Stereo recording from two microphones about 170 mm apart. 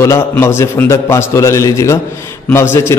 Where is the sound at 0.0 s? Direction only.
15° left (ahead or behind).